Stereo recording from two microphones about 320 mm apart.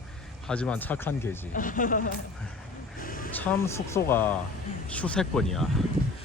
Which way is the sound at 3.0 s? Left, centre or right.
Left.